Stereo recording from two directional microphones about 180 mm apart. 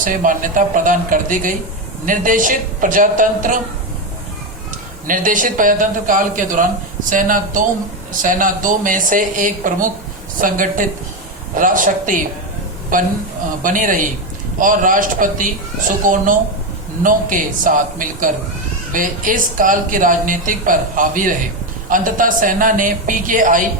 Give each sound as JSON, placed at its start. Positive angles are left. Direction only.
{"t": 0.0, "sound": "a woman's voice", "side_deg": -50}
{"t": 5.0, "sound": "a woman's voice", "side_deg": -50}